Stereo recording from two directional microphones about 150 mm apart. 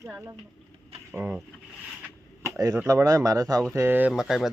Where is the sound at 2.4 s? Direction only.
20° right (ahead or behind).